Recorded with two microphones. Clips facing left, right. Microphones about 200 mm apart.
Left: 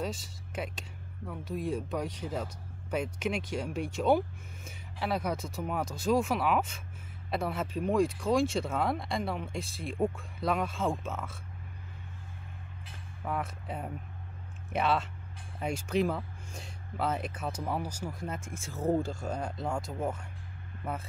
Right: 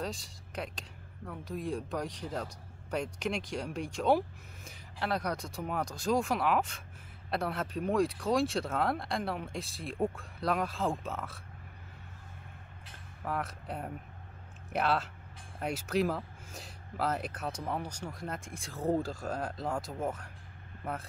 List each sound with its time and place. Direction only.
0.0 s speech: 5° left (ahead or behind)
13.2 s speech: centre (ahead or behind)